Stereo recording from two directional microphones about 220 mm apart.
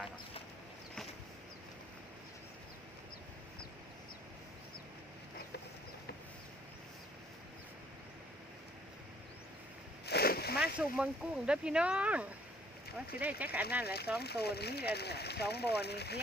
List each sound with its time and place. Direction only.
10.1 s a sound: 45° left (ahead or behind)
10.8 s speech: 5° right (ahead or behind)
13.8 s speech: 45° left (ahead or behind)